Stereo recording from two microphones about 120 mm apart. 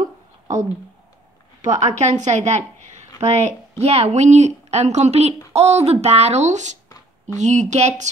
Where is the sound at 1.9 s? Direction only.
70° right (ahead or behind).